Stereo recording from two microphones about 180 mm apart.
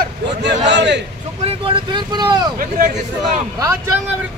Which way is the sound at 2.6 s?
45° right (ahead or behind).